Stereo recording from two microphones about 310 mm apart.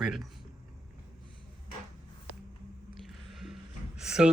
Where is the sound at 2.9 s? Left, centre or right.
Centre.